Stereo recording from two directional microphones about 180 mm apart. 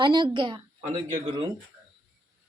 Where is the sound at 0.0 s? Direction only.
25° right (ahead or behind).